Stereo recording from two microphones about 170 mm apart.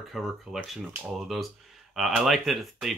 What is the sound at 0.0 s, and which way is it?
Speech, centre (ahead or behind).